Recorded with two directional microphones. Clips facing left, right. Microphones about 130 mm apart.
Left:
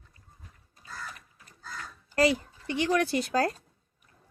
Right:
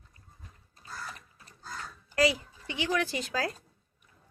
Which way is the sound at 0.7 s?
30° right (ahead or behind).